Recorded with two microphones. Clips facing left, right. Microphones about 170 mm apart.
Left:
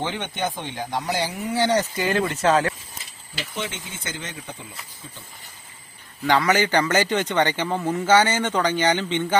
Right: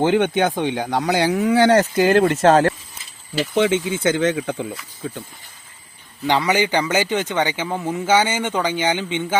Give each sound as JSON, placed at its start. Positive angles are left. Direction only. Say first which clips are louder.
{"t": 0.0, "sound": "speech", "louder": "right 10 dB", "side_deg": -55}
{"t": 3.5, "sound": "speech", "louder": "right 15 dB", "side_deg": -90}
{"t": 6.3, "sound": "speech", "louder": "right 1 dB", "side_deg": -10}